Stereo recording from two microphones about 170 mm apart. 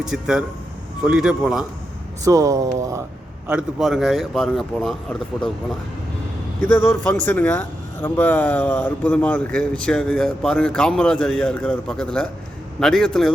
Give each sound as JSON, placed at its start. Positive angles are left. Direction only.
{"t": 0.0, "sound": "speech", "side_deg": -5}
{"t": 2.2, "sound": "speech", "side_deg": -20}
{"t": 3.4, "sound": "speech", "side_deg": -5}
{"t": 6.7, "sound": "speech", "side_deg": 10}